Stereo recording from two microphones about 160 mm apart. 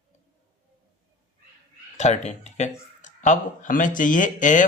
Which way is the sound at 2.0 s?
45° left (ahead or behind).